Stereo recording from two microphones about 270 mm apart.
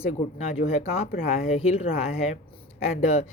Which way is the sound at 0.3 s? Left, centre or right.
Left.